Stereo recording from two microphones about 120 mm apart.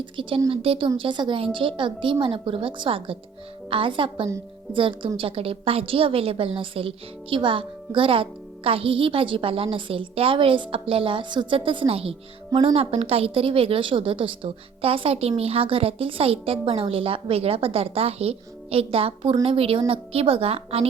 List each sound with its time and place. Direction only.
0.0 s a woman's voice: 45° right (ahead or behind)